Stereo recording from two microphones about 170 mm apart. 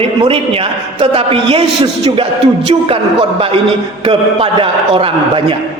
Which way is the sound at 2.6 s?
35° right (ahead or behind).